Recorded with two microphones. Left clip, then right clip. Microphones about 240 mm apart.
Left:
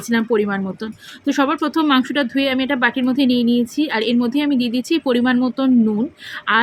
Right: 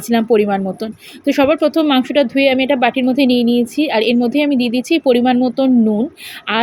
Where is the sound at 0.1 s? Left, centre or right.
Centre.